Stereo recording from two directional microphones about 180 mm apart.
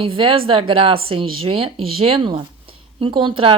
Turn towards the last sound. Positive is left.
turn(degrees=-30)  # may be behind; listen again after turning